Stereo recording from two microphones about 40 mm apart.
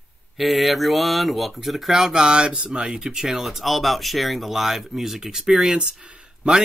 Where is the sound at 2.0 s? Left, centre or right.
Centre.